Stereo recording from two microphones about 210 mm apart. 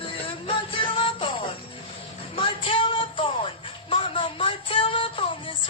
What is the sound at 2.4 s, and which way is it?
Music, 25° left (ahead or behind).